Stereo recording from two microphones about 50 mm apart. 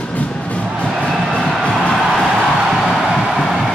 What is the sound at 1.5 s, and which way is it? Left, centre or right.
Music, centre.